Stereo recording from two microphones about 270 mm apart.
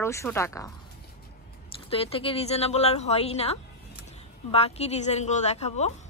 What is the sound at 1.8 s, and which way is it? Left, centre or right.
A woman's voice, left.